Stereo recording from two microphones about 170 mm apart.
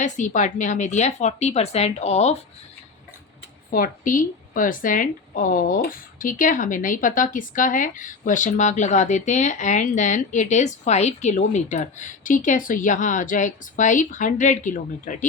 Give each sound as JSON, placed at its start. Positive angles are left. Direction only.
{"t": 0.0, "sound": "speech", "side_deg": 45}
{"t": 3.7, "sound": "a woman's voice", "side_deg": 55}